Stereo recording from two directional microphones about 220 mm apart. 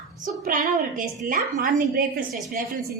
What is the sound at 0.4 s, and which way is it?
A woman's voice, 40° right (ahead or behind).